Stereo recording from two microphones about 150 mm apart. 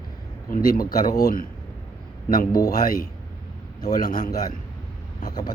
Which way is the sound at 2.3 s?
70° left (ahead or behind).